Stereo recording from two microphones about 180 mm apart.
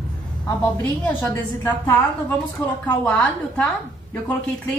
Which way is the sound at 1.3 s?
10° left (ahead or behind).